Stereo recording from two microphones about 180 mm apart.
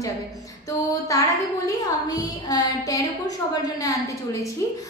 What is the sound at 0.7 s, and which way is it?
A woman's voice, 20° left (ahead or behind).